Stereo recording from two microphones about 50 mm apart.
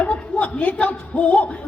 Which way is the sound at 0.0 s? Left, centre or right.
Left.